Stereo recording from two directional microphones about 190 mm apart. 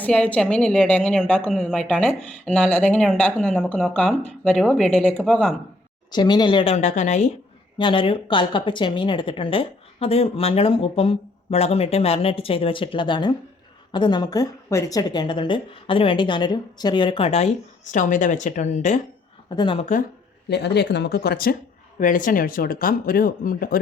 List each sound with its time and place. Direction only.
0.0 s a woman's voice: 5° left (ahead or behind)
6.1 s a woman's voice: 20° left (ahead or behind); by 7.3 s 40° left (ahead or behind)
7.8 s a woman's voice: 25° left (ahead or behind)
19.5 s a woman's voice: 25° left (ahead or behind)
20.5 s speech: 65° left (ahead or behind)